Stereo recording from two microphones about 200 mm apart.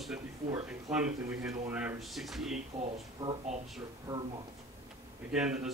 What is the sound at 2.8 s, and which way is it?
Speech, 30° right (ahead or behind).